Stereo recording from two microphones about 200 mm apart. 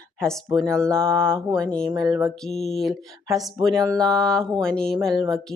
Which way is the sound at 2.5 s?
35° left (ahead or behind).